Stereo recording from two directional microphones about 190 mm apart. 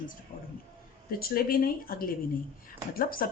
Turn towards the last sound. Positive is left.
turn(degrees=50)  # may be behind; listen again after turning